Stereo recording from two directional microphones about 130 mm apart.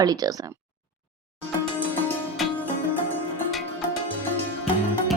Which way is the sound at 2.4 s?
Centre (ahead or behind).